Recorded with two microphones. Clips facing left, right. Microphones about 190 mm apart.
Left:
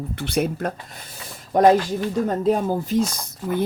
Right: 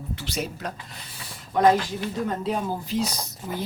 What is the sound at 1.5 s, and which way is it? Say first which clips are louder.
Speech: left 4 dB; 45° left (ahead or behind).